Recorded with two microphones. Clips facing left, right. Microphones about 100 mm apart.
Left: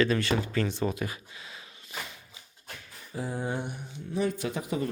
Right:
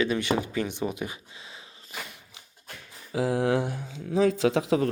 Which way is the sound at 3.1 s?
90° right.